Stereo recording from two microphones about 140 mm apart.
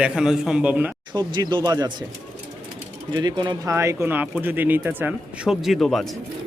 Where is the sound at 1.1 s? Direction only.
30° right (ahead or behind).